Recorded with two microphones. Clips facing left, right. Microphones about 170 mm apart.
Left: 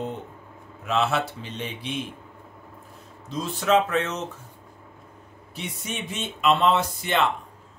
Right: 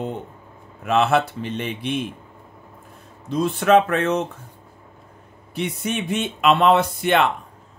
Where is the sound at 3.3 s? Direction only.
60° right (ahead or behind).